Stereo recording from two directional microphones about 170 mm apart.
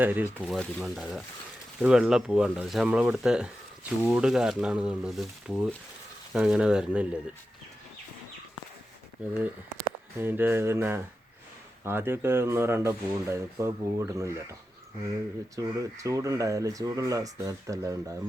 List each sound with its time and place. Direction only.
0.0 s speech: 10° right (ahead or behind)
10.2 s speech: 10° right (ahead or behind)
15.5 s speech: 20° right (ahead or behind)